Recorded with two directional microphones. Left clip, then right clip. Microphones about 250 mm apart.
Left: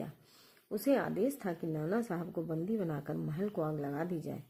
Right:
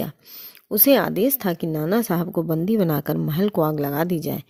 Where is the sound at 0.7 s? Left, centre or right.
Right.